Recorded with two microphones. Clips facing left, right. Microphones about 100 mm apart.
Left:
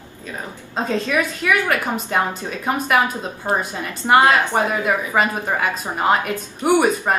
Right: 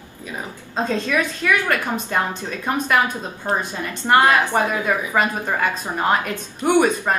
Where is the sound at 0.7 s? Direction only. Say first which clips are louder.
Left 1 dB; 10° left (ahead or behind).